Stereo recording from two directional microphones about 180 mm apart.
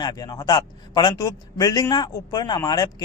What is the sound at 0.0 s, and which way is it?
A man's voice, 20° left (ahead or behind).